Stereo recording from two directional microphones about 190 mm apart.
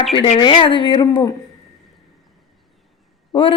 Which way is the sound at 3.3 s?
25° left (ahead or behind).